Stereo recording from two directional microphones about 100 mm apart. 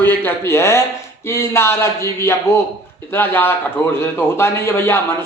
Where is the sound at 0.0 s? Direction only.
20° left (ahead or behind).